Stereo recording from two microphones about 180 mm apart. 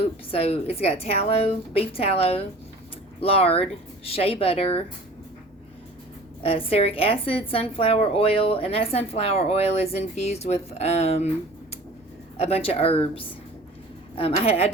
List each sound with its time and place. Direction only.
0.0 s a woman's voice: 35° left (ahead or behind)
6.4 s a woman's voice: 30° left (ahead or behind)
12.4 s a woman's voice: 35° left (ahead or behind)